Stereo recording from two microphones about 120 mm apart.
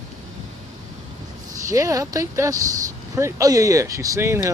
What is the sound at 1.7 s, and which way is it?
Speech, 25° right (ahead or behind).